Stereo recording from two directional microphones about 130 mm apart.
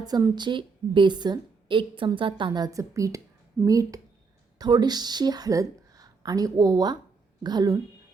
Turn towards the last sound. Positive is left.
turn(degrees=-30)  # may be behind; listen again after turning